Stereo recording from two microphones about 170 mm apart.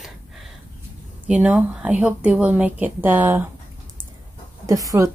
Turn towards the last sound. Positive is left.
turn(degrees=-20)  # may be behind; listen again after turning